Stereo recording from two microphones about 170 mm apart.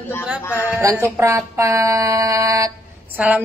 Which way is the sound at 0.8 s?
15° right (ahead or behind).